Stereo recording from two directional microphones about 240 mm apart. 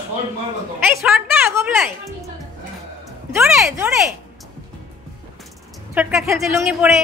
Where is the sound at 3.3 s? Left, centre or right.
Centre.